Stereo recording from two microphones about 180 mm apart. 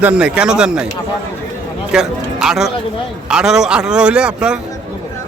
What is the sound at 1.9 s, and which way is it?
A man's voice, 5° right (ahead or behind).